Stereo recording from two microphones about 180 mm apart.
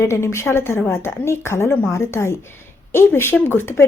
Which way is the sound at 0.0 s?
15° left (ahead or behind).